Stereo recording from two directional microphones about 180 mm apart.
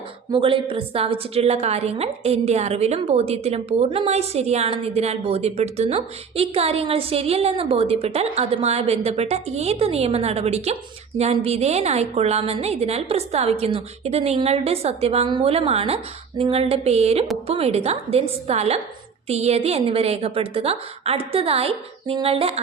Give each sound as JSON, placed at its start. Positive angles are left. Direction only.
{"t": 0.3, "sound": "a woman's voice", "side_deg": -30}